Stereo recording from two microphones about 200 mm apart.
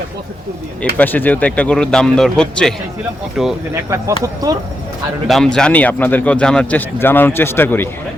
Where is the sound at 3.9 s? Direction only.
15° right (ahead or behind).